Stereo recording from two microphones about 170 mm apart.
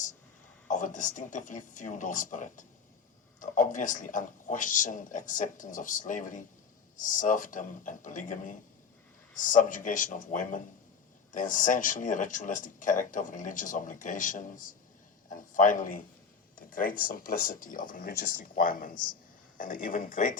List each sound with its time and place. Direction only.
0.7 s a man's voice: 50° left (ahead or behind)